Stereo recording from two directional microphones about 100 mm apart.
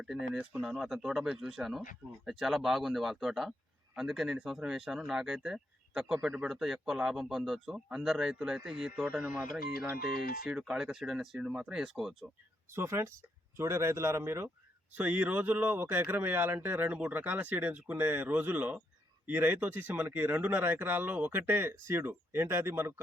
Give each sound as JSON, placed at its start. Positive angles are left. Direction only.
{"t": 0.0, "sound": "speech", "side_deg": -5}
{"t": 10.4, "sound": "speech", "side_deg": 0}
{"t": 12.7, "sound": "a man's voice", "side_deg": -25}